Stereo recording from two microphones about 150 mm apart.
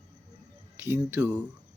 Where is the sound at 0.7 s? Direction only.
15° right (ahead or behind).